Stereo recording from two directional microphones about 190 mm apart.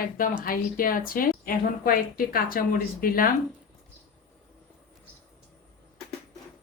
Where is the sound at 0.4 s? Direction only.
50° left (ahead or behind).